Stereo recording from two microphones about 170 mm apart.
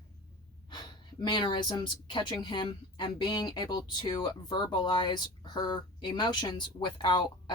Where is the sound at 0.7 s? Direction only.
25° left (ahead or behind).